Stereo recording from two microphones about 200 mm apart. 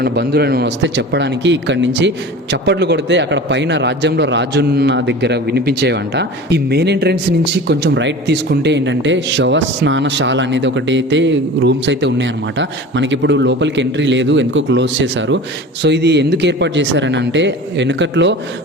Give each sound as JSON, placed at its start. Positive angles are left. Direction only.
{"t": 0.0, "sound": "a man's voice", "side_deg": -55}